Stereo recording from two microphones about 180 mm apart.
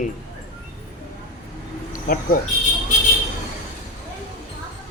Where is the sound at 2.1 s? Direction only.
55° left (ahead or behind).